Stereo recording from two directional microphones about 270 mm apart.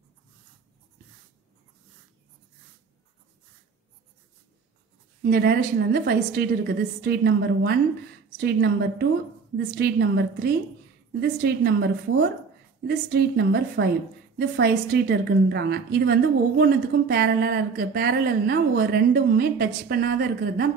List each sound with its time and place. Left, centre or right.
5.2 s a woman's voice: right